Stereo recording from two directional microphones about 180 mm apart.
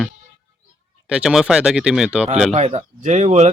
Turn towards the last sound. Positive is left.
turn(degrees=-40)  # may be behind; listen again after turning